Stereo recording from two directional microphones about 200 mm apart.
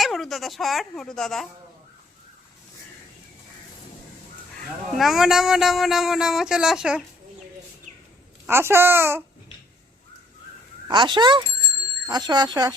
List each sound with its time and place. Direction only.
0.0 s speech: centre (ahead or behind)
4.9 s speech: centre (ahead or behind)
8.4 s a child's voice: 10° right (ahead or behind)
10.8 s speech: 25° right (ahead or behind)